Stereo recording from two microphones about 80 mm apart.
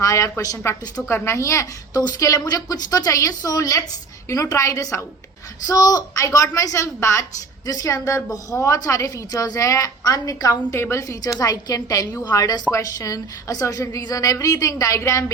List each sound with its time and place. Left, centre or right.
0.0 s a woman's voice: left
2.0 s a woman's voice: left
7.7 s a woman's voice: left
10.8 s a woman's voice: left
11.3 s a woman's voice: left